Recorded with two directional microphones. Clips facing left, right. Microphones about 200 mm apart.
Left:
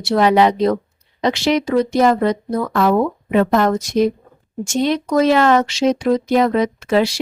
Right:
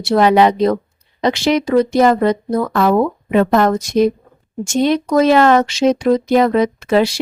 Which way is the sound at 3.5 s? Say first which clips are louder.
Right 3 dB; 55° right (ahead or behind).